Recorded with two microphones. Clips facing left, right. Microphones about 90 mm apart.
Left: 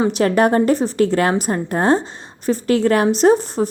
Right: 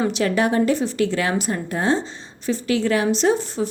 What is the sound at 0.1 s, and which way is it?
A woman's voice, 45° left (ahead or behind).